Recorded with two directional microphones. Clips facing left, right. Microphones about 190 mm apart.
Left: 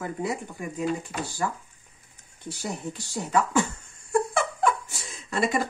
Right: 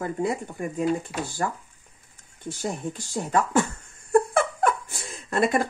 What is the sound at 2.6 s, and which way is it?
A woman's voice, 50° right (ahead or behind).